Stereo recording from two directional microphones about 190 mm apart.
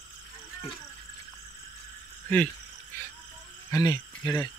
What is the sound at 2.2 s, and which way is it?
Speech, 5° left (ahead or behind).